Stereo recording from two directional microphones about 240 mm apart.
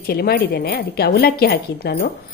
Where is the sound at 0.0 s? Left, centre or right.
Left.